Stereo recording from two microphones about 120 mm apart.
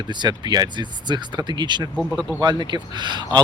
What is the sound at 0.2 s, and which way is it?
Speech, 35° right (ahead or behind).